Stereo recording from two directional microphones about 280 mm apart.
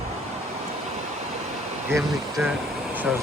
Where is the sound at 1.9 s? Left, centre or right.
Centre.